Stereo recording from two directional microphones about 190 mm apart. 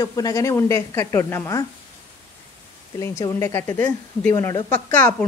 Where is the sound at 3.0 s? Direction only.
15° left (ahead or behind).